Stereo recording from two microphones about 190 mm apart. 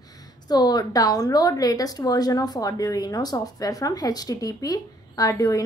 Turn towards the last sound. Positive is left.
turn(degrees=15)  # may be behind; listen again after turning